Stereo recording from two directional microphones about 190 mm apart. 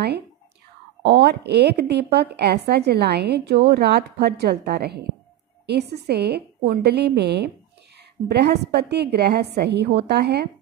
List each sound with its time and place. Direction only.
1.0 s a woman's voice: 60° right (ahead or behind)